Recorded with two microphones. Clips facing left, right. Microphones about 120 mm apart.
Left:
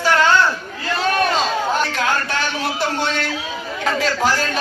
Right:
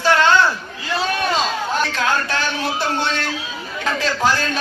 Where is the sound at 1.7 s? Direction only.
15° left (ahead or behind).